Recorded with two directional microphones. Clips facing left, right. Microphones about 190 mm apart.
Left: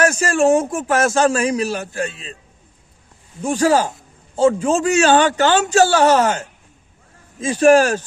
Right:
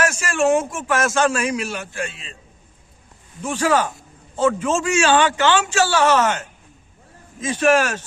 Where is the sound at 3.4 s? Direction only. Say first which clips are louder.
Left 4 dB; 35° left (ahead or behind).